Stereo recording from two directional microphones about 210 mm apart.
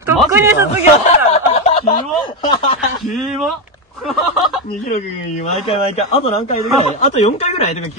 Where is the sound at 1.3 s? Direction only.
30° left (ahead or behind).